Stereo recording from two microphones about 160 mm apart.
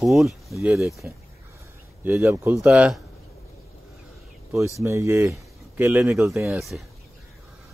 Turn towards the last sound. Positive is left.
turn(degrees=0)  # may be behind; listen again after turning